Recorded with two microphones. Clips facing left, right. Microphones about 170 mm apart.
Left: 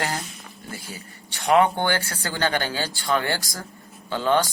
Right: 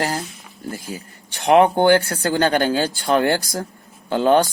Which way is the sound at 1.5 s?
50° right (ahead or behind).